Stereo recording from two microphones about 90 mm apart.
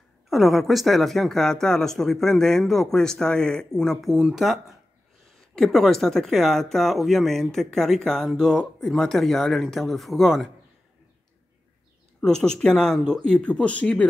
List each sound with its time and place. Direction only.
0.3 s a woman's voice: centre (ahead or behind)
12.2 s speech: 10° left (ahead or behind)